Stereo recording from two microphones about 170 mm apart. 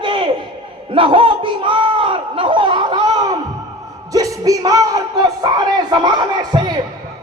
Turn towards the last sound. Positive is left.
turn(degrees=-25)  # may be behind; listen again after turning